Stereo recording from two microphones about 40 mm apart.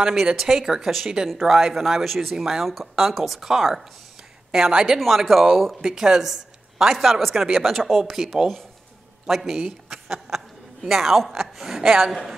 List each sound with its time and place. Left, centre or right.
0.0 s a woman's voice: centre
4.9 s speech: centre
5.9 s a woman's voice: centre
7.7 s speech: centre
8.0 s a man's voice: centre